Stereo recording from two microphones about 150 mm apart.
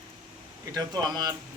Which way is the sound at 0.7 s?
25° right (ahead or behind).